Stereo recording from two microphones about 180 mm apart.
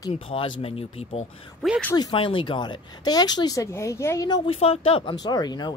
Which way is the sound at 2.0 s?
25° left (ahead or behind).